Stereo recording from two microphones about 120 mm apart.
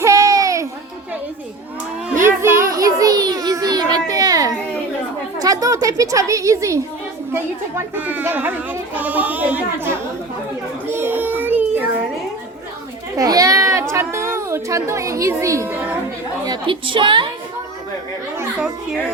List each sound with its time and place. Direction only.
0.0 s music: 30° right (ahead or behind)
2.2 s child singing: 25° right (ahead or behind)
5.4 s a child's voice: 30° right (ahead or behind)
10.8 s child singing: 15° right (ahead or behind)
13.1 s a child's voice: 30° right (ahead or behind)
16.5 s a woman's voice: 45° right (ahead or behind)